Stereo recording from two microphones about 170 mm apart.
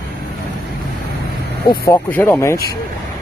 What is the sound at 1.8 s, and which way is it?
Speech, 10° left (ahead or behind).